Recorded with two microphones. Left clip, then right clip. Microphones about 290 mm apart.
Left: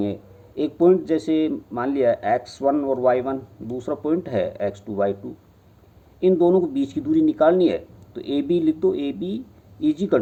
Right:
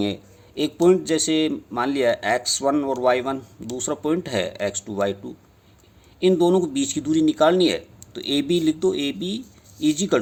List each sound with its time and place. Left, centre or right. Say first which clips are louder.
0.0 s speech: right 1 dB; right
6.1 s speech: left 1 dB; right